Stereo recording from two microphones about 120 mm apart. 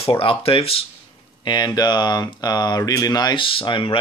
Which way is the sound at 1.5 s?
35° left (ahead or behind).